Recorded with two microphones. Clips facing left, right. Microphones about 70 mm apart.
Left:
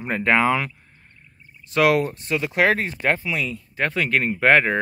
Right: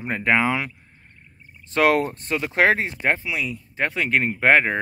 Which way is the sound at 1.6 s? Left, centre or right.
Right.